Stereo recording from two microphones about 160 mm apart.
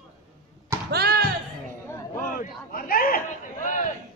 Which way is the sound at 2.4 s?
60° left (ahead or behind).